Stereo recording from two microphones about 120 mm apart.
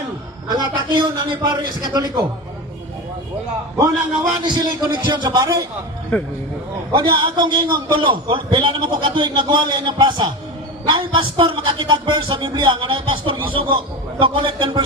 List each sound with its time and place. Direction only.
0.4 s a man's voice: 40° right (ahead or behind)
4.4 s a man's voice: 40° right (ahead or behind)
6.9 s a man's voice: 40° right (ahead or behind)